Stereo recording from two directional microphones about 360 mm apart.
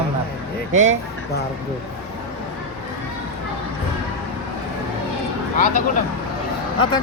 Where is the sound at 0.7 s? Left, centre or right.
Centre.